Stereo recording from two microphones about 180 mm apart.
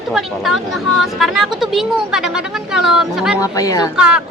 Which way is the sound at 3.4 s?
20° left (ahead or behind).